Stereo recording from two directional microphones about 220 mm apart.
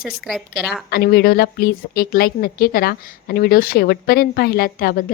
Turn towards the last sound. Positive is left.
turn(degrees=40)  # may be behind; listen again after turning